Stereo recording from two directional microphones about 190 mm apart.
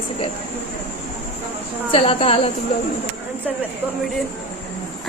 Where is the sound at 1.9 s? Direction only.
30° left (ahead or behind).